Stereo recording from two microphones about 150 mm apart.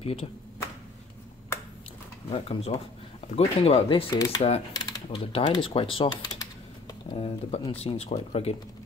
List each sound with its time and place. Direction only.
0.0 s speech: 40° left (ahead or behind)
2.2 s speech: 40° left (ahead or behind)
4.1 s speech: 25° left (ahead or behind)
4.4 s speech: 45° left (ahead or behind)
7.2 s speech: 40° left (ahead or behind)